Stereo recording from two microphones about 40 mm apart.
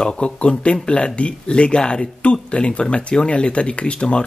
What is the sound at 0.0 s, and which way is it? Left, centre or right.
Speech, left.